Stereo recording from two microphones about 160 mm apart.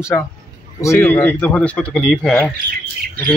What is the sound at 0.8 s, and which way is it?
Speech, 15° left (ahead or behind).